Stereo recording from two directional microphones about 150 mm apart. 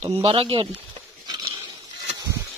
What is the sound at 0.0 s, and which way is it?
Speech, 40° right (ahead or behind).